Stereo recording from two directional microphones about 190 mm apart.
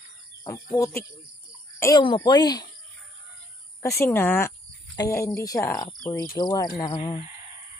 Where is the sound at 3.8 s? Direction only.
15° left (ahead or behind).